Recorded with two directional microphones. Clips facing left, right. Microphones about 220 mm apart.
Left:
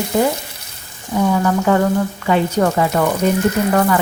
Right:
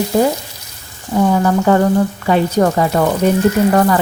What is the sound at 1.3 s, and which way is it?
A woman's voice, 35° right (ahead or behind).